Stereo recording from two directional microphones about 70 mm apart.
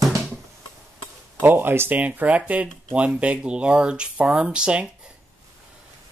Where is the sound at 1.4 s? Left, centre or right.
Right; by 4.8 s centre.